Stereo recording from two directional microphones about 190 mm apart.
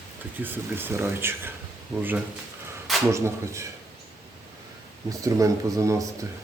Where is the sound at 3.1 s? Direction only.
15° right (ahead or behind).